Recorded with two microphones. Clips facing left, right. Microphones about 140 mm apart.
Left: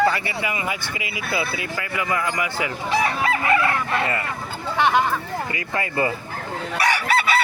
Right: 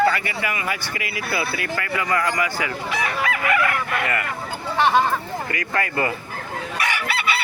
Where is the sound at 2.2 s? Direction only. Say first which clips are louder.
Right 1 dB; 25° left (ahead or behind).